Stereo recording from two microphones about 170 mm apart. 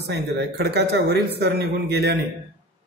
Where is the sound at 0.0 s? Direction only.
75° right (ahead or behind).